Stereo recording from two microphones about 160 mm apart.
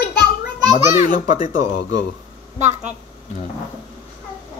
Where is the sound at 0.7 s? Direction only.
55° left (ahead or behind).